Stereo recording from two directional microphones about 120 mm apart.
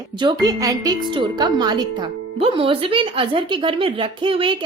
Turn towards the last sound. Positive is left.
turn(degrees=-45)  # may be behind; listen again after turning